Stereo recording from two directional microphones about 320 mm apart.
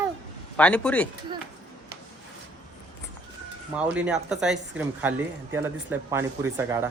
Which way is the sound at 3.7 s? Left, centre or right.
Centre.